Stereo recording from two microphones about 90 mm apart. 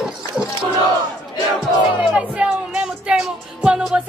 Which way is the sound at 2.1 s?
10° right (ahead or behind).